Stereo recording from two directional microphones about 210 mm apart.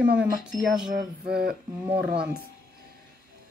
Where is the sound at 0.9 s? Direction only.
50° right (ahead or behind).